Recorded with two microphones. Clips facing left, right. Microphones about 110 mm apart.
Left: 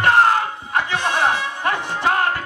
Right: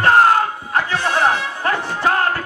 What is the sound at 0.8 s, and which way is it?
Music, 20° left (ahead or behind).